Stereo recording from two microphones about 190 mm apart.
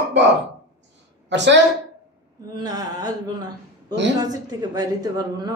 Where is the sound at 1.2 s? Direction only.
70° right (ahead or behind).